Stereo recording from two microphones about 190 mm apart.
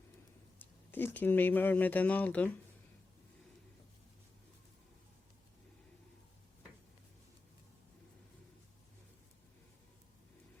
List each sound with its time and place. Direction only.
0.6 s speech: 10° left (ahead or behind)